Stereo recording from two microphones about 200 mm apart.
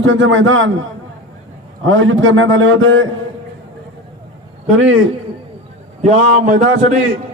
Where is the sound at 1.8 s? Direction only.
80° right.